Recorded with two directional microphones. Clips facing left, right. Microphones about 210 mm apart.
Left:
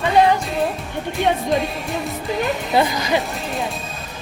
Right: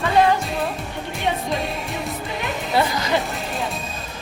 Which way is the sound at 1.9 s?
Centre (ahead or behind).